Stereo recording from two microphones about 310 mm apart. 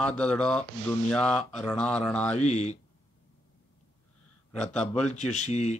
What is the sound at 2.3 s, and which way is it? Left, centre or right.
Speech, left.